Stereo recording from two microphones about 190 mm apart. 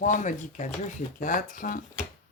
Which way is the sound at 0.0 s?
40° left (ahead or behind).